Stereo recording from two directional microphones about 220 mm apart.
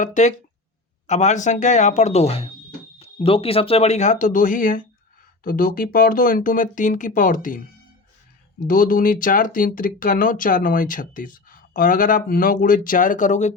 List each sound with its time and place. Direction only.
0.0 s speech: 35° left (ahead or behind)
8.6 s speech: 40° left (ahead or behind)